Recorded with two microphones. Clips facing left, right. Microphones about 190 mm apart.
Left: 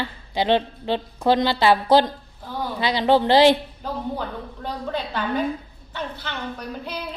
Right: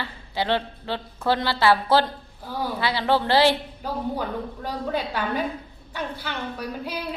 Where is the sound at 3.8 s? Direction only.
10° right (ahead or behind).